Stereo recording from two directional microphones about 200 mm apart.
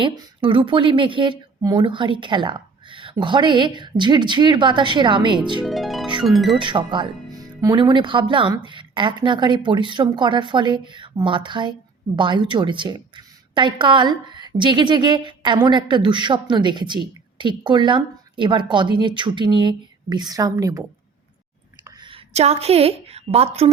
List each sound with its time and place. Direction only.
0.0 s speech: 25° right (ahead or behind)
5.6 s harp: centre (ahead or behind)
6.2 s speech: centre (ahead or behind)
6.6 s speech: 25° right (ahead or behind)
21.8 s a woman's voice: 25° right (ahead or behind)